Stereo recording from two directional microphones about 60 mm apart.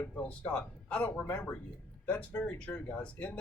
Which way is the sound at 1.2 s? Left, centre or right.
Left.